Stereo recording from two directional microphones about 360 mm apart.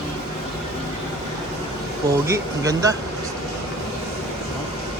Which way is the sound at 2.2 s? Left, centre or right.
Centre.